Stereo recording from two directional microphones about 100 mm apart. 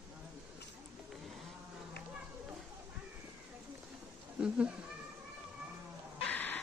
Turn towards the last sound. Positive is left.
turn(degrees=15)  # may be behind; listen again after turning